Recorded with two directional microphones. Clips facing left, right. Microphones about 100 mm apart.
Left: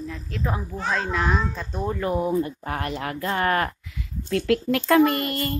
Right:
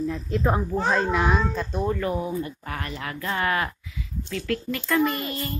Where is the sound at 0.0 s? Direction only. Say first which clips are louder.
Right 7 dB; centre (ahead or behind).